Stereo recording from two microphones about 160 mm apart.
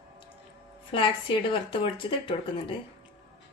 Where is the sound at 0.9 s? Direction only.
35° left (ahead or behind).